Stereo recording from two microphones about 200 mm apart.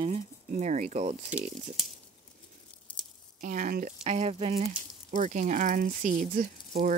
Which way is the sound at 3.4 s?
40° right (ahead or behind).